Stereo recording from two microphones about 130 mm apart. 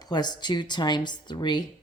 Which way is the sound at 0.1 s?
35° left (ahead or behind).